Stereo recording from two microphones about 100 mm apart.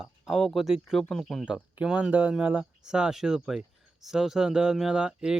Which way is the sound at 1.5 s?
10° right (ahead or behind).